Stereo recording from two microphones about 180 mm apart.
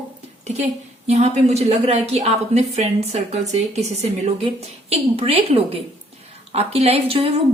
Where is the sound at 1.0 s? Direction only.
35° right (ahead or behind).